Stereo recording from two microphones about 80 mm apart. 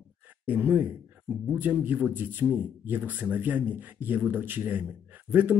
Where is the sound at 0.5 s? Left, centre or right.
Right.